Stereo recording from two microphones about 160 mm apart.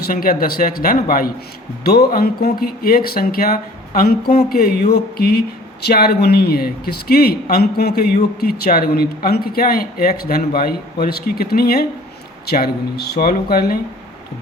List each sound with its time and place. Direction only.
0.1 s speech: 65° left (ahead or behind)
1.8 s speech: 80° left
2.1 s speech: 70° left (ahead or behind)